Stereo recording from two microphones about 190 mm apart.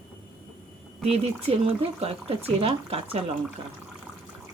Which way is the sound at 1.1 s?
30° right (ahead or behind).